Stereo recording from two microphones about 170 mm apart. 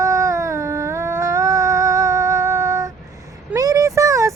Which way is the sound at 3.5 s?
20° right (ahead or behind).